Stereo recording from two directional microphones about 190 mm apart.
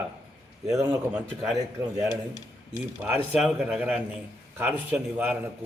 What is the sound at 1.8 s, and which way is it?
Speech, 15° right (ahead or behind).